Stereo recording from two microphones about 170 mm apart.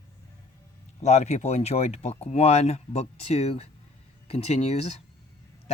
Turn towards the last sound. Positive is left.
turn(degrees=40)  # may be behind; listen again after turning